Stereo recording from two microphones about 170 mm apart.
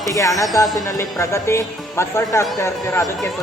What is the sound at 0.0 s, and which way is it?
Speech, 20° left (ahead or behind).